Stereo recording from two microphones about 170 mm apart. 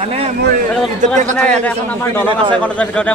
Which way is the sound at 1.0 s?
45° right (ahead or behind).